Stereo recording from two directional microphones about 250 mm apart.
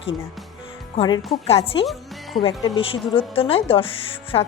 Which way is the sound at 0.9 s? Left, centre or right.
Centre.